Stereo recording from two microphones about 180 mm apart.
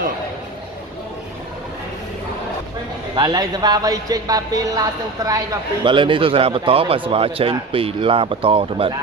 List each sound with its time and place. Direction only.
3.2 s speech: 20° right (ahead or behind)